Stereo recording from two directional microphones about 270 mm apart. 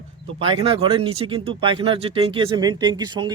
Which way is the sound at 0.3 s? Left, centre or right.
Centre.